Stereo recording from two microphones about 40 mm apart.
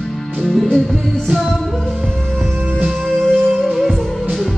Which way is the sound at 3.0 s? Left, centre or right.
Centre.